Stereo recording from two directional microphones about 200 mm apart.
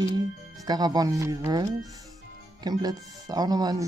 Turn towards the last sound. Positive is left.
turn(degrees=-20)  # may be behind; listen again after turning